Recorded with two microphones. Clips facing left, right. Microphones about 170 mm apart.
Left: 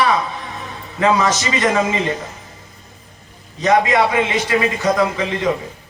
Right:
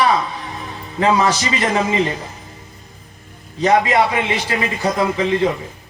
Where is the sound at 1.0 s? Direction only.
30° right (ahead or behind).